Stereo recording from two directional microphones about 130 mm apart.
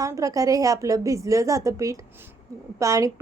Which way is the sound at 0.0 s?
25° right (ahead or behind).